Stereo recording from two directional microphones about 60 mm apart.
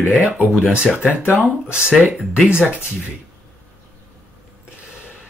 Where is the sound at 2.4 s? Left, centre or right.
Centre.